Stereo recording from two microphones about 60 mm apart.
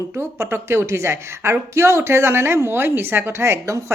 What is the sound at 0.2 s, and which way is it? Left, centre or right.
A woman's voice, right.